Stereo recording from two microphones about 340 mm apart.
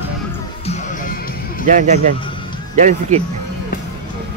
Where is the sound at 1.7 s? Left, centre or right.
Right.